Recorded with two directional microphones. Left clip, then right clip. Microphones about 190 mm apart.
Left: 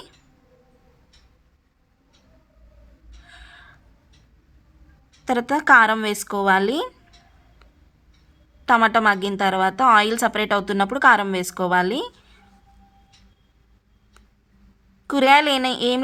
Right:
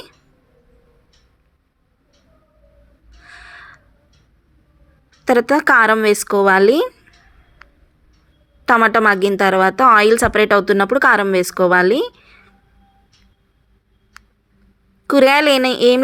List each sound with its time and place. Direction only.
3.2 s a sound: 20° right (ahead or behind)
5.2 s a woman's voice: 25° right (ahead or behind)
8.6 s a woman's voice: 20° right (ahead or behind)
15.0 s a woman's voice: 25° right (ahead or behind)